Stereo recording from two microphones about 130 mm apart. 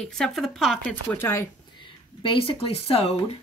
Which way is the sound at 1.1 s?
15° left (ahead or behind).